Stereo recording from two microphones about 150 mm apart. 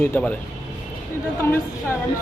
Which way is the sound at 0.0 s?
10° left (ahead or behind).